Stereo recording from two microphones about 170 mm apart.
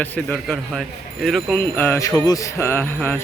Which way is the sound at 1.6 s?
10° left (ahead or behind).